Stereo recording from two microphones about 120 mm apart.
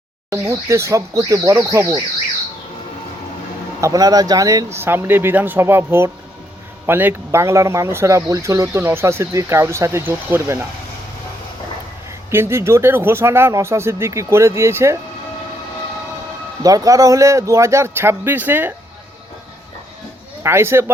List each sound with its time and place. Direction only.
0.3 s speech: 25° right (ahead or behind)
3.8 s speech: 30° right (ahead or behind)
12.3 s speech: 20° right (ahead or behind)
16.6 s speech: 30° right (ahead or behind)
20.4 s speech: 20° right (ahead or behind)